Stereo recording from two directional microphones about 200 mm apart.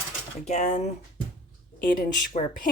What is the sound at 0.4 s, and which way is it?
Speech, 35° left (ahead or behind).